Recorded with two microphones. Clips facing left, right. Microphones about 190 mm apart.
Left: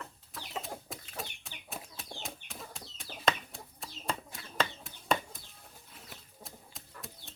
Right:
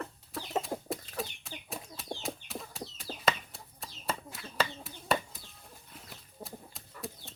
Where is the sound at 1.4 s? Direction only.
Centre (ahead or behind).